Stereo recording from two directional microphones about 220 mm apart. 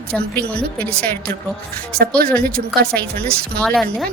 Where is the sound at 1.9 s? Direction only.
45° right (ahead or behind).